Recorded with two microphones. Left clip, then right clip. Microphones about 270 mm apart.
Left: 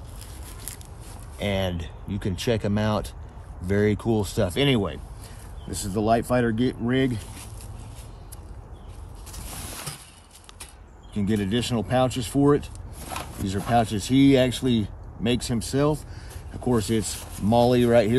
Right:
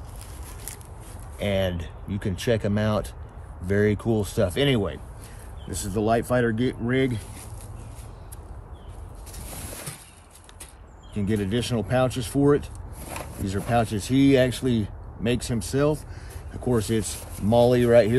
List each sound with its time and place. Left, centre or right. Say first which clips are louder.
1.4 s speech: right 2 dB; left
11.4 s speech: even; left
13.1 s a sound: left 2 dB; centre
13.7 s speech: left 2 dB; left